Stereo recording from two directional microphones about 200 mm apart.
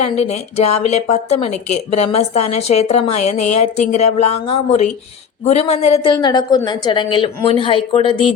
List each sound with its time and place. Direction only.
0.2 s a man's voice: 30° left (ahead or behind)